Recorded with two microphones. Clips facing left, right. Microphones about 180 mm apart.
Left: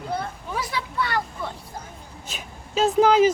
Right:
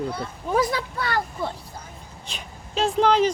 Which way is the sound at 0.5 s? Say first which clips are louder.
Right 6 dB; 45° right (ahead or behind).